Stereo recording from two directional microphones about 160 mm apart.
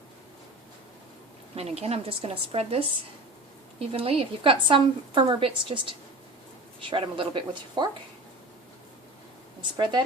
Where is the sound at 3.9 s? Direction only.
35° right (ahead or behind).